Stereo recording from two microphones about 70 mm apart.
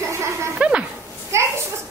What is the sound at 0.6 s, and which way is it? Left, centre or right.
Speech, centre.